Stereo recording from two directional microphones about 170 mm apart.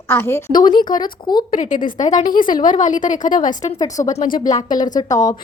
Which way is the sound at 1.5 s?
50° left (ahead or behind).